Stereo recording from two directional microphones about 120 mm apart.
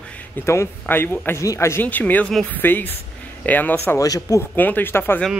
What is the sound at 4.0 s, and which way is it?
Speech, 30° left (ahead or behind).